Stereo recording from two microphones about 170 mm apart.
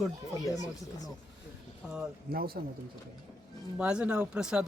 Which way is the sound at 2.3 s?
60° right (ahead or behind).